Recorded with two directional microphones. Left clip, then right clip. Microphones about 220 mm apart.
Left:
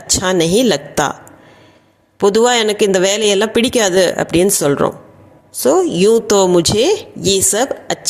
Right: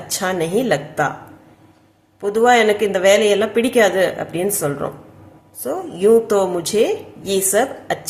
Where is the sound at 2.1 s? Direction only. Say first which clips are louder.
Left 2 dB; 40° left (ahead or behind).